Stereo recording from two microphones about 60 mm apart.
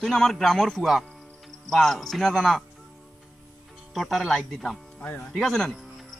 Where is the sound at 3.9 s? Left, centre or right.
Centre.